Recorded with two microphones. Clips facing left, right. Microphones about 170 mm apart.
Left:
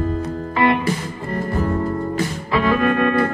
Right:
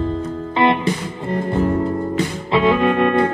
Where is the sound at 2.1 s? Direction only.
25° right (ahead or behind).